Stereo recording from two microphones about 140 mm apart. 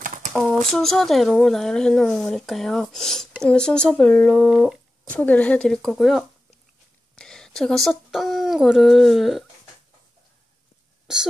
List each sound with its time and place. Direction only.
0.0 s a sound: 65° right (ahead or behind)
0.3 s speech: 5° left (ahead or behind)
11.1 s speech: 5° right (ahead or behind)